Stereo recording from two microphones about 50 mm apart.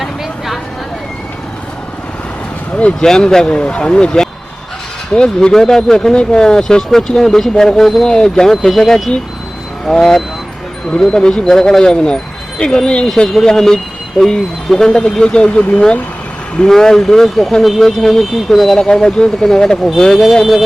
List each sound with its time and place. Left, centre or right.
0.0 s vehicle: centre
3.0 s speech: centre
11.4 s speech: centre
20.4 s speech: centre